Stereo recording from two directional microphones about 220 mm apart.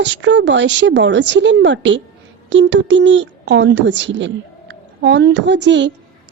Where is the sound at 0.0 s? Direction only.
55° right (ahead or behind).